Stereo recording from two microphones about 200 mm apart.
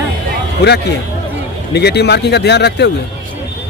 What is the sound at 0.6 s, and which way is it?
A man's voice, 55° left (ahead or behind).